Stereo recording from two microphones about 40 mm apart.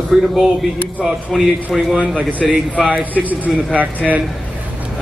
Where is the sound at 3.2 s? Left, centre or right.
Right.